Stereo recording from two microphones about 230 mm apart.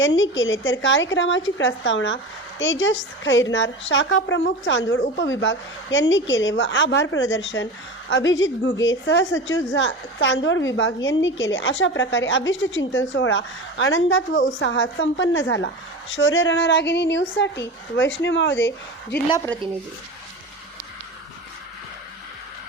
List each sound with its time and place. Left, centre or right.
0.0 s a woman's voice: left